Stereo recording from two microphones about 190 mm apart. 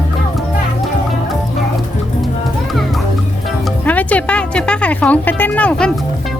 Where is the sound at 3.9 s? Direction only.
10° left (ahead or behind).